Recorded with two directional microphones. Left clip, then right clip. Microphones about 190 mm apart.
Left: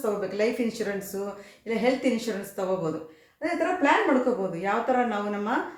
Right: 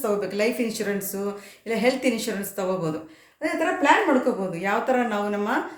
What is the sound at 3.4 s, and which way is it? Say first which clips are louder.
A woman's voice: right 3 dB; 20° right (ahead or behind).